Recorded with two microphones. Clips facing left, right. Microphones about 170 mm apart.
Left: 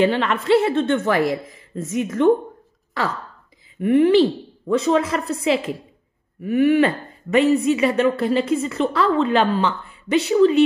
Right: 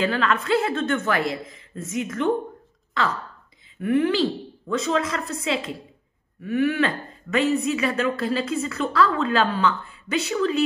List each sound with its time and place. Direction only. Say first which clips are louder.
0.0 s speech: left 4 dB; 25° left (ahead or behind)
3.8 s speech: left 6 dB; 30° left (ahead or behind)